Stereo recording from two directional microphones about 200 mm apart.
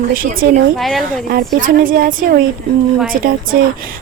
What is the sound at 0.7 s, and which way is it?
Speech, centre (ahead or behind).